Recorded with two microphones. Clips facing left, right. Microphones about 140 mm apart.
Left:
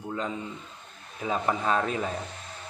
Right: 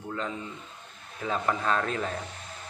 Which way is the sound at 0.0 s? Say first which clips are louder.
Left 2 dB; 15° left (ahead or behind).